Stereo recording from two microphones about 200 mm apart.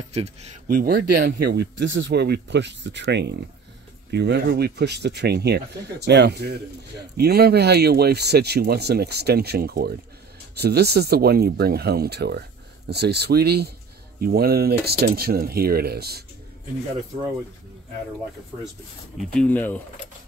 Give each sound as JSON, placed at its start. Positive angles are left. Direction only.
{"t": 0.1, "sound": "speech", "side_deg": -30}
{"t": 0.7, "sound": "speech", "side_deg": -50}
{"t": 19.1, "sound": "speech", "side_deg": 5}